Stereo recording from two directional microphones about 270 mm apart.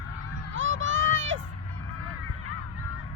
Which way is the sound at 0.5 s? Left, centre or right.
Right.